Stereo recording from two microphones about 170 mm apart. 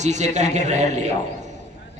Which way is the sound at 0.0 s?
45° right (ahead or behind).